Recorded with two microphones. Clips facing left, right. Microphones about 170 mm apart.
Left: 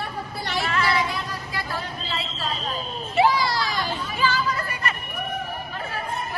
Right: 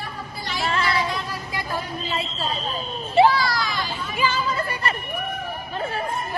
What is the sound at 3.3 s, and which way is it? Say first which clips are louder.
Speech: right 1 dB; 20° left (ahead or behind).